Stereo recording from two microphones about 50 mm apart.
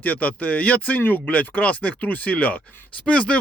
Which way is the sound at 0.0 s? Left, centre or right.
Left.